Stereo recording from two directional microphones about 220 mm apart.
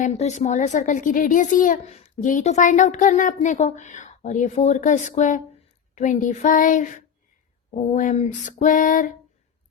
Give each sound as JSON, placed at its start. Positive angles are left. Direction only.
{"t": 0.0, "sound": "speech", "side_deg": 30}